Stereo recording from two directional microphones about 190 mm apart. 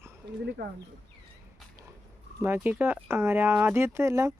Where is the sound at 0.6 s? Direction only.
60° right (ahead or behind).